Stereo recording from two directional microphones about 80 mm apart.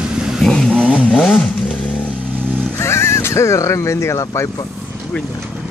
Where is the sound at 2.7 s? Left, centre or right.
Left.